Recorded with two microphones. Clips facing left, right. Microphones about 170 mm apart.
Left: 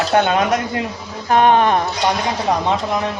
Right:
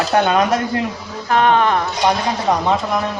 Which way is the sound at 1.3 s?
20° left (ahead or behind).